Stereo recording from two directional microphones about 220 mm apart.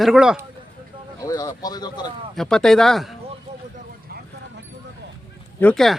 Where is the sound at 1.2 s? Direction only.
15° left (ahead or behind).